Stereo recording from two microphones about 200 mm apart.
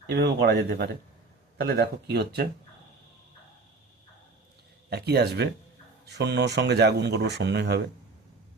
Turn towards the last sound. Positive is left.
turn(degrees=-55)  # may be behind; listen again after turning